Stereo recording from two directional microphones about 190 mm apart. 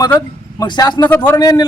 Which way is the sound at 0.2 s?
20° left (ahead or behind).